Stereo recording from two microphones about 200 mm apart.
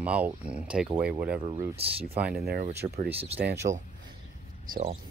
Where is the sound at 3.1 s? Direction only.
30° right (ahead or behind).